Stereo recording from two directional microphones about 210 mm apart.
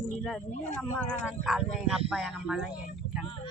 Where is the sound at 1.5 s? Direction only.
Centre (ahead or behind).